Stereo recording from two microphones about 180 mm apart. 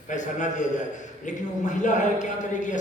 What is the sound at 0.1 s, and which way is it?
A man's voice, 45° left (ahead or behind).